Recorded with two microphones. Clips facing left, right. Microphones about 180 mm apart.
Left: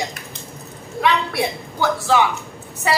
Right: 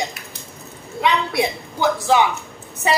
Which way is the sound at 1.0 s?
20° right (ahead or behind).